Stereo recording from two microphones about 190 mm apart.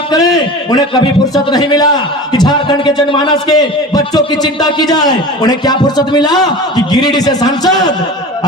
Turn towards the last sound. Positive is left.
turn(degrees=20)  # may be behind; listen again after turning